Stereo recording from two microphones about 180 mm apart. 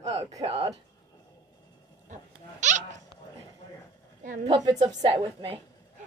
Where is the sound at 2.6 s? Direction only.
40° right (ahead or behind).